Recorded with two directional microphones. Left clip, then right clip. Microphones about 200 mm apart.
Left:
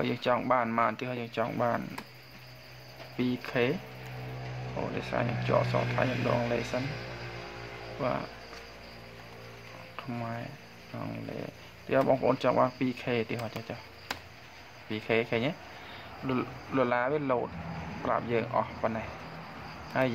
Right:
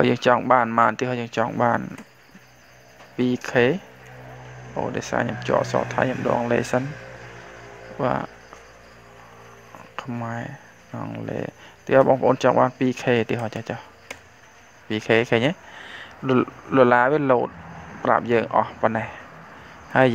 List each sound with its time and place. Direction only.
0.0 s speech: 40° right (ahead or behind)
3.2 s speech: 40° right (ahead or behind)
4.9 s speech: 40° right (ahead or behind)
8.0 s speech: 40° right (ahead or behind)
9.9 s speech: 40° right (ahead or behind)
11.9 s speech: 40° right (ahead or behind)
14.9 s speech: 40° right (ahead or behind)